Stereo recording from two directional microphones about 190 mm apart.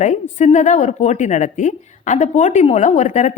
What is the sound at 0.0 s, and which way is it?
Speech, 40° left (ahead or behind).